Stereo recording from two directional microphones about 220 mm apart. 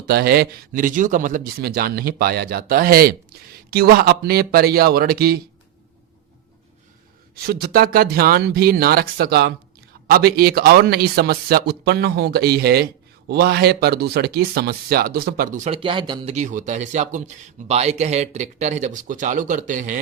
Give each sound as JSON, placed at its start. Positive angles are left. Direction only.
{"t": 0.0, "sound": "a man's voice", "side_deg": -45}
{"t": 7.4, "sound": "a man's voice", "side_deg": -45}
{"t": 16.3, "sound": "speech", "side_deg": -35}